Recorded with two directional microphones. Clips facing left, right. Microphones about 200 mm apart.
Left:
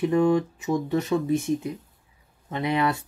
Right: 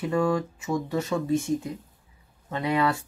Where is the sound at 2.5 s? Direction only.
20° left (ahead or behind).